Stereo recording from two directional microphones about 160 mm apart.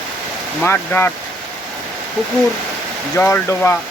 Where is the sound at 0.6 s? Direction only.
15° left (ahead or behind).